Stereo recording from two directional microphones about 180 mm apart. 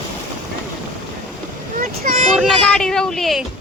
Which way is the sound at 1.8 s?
50° right (ahead or behind).